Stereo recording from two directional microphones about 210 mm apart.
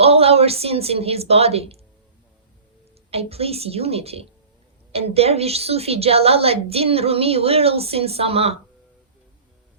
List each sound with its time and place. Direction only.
0.0 s a woman's voice: 30° right (ahead or behind)
3.1 s a woman's voice: 30° right (ahead or behind)